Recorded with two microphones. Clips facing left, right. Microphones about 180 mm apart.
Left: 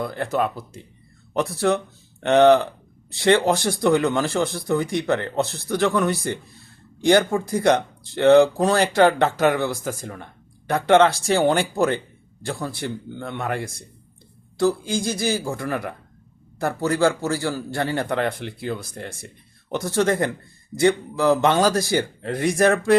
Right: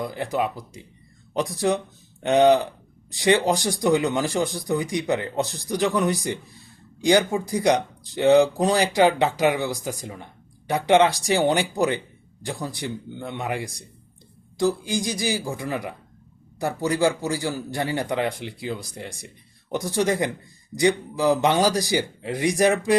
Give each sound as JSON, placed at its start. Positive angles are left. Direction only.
{"t": 0.0, "sound": "speech", "side_deg": -15}